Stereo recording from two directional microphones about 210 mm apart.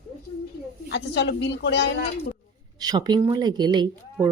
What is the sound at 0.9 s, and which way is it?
A woman's voice, 55° left (ahead or behind).